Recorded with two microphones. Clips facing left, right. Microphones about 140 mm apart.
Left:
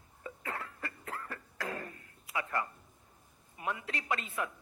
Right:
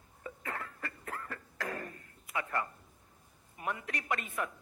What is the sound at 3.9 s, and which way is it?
Speech, 20° left (ahead or behind).